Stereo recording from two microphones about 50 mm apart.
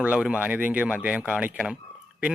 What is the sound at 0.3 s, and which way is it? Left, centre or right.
Speech, right.